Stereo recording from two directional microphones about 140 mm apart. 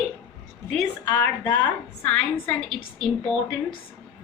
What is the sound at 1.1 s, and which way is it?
A woman's voice, 15° left (ahead or behind).